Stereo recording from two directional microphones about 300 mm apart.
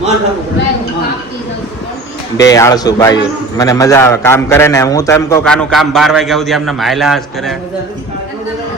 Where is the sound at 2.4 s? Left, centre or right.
Centre.